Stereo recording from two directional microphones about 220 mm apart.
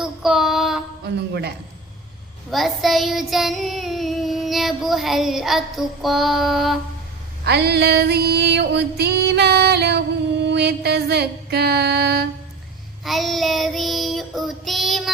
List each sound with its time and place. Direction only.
0.0 s child singing: centre (ahead or behind)
1.0 s female singing: 50° right (ahead or behind)
2.5 s child singing: centre (ahead or behind)
7.4 s female singing: 50° right (ahead or behind)
13.1 s child singing: centre (ahead or behind)